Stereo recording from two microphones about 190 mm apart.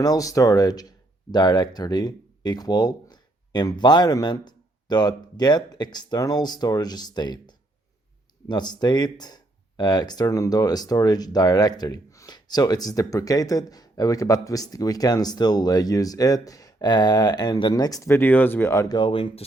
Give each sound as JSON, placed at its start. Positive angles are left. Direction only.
{"t": 0.0, "sound": "speech", "side_deg": 20}